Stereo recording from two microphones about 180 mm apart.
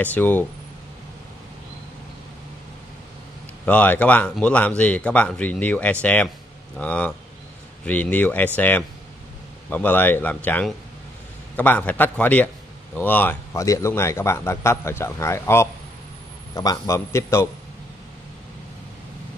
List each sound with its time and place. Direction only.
0.0 s a man's voice: 10° left (ahead or behind)
3.6 s a man's voice: 10° left (ahead or behind)